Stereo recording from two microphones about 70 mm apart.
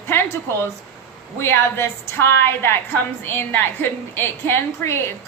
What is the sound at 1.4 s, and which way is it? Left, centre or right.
A woman's voice, left.